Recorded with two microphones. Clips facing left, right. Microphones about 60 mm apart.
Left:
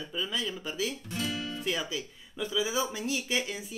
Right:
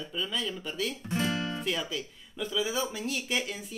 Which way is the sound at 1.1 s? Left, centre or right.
Right.